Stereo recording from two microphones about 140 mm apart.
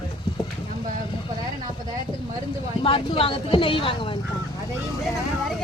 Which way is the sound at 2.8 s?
40° left (ahead or behind).